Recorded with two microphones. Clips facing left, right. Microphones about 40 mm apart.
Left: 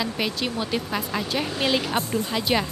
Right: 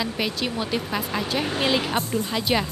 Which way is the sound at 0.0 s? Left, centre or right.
Centre.